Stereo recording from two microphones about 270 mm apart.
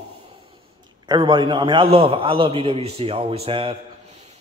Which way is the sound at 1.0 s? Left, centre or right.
Centre.